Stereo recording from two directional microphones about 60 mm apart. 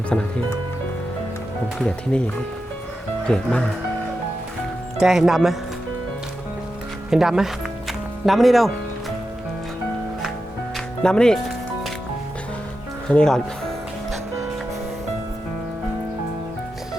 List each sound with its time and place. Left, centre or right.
0.1 s speech: centre
2.1 s speech: centre
4.9 s speech: centre
7.1 s music: centre
11.0 s speech: centre
13.1 s music: centre